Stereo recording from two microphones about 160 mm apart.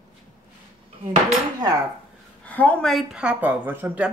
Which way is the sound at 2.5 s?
10° left (ahead or behind).